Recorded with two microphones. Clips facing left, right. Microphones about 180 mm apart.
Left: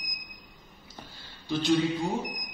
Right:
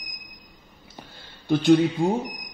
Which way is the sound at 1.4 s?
55° right (ahead or behind).